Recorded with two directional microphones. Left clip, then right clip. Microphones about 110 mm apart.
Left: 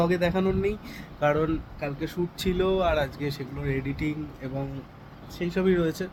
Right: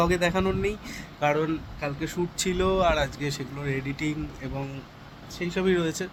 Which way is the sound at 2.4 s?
5° left (ahead or behind).